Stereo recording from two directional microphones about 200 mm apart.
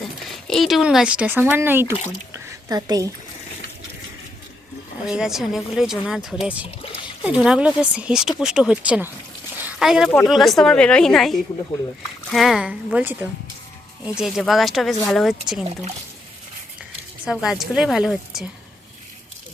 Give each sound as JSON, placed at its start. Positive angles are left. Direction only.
{"t": 0.0, "sound": "speech", "side_deg": 0}
{"t": 2.3, "sound": "a sound", "side_deg": -20}
{"t": 5.0, "sound": "speech", "side_deg": 0}
{"t": 9.6, "sound": "a sound", "side_deg": 0}
{"t": 10.2, "sound": "speech", "side_deg": 0}
{"t": 17.2, "sound": "speech", "side_deg": -5}